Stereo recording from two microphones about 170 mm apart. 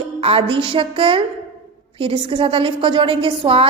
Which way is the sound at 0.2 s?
35° right (ahead or behind).